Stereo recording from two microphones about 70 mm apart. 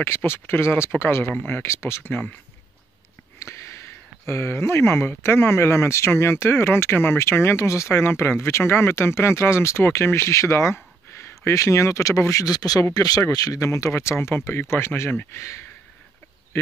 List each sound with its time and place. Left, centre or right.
0.0 s speech: left
3.3 s a sound: left
4.3 s speech: left
12.3 s speech: left